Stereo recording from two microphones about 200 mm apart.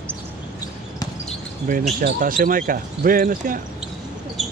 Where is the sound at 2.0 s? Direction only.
45° right (ahead or behind).